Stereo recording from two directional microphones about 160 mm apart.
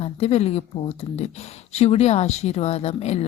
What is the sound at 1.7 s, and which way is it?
Speech, 40° left (ahead or behind).